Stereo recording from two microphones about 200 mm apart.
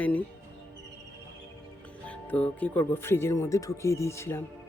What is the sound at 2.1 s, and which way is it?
Speech, 5° left (ahead or behind).